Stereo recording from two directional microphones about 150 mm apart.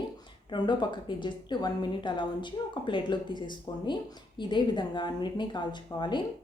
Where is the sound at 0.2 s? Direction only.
30° left (ahead or behind).